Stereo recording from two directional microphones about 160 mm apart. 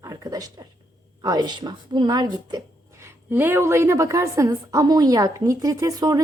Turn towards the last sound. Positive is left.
turn(degrees=-20)  # may be behind; listen again after turning